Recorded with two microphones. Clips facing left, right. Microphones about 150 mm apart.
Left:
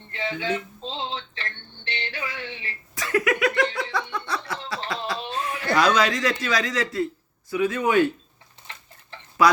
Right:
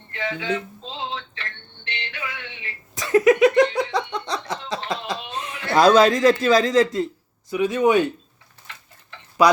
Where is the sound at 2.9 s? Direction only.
25° right (ahead or behind).